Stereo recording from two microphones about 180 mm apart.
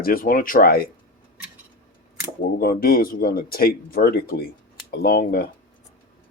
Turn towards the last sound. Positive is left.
turn(degrees=55)  # may be behind; listen again after turning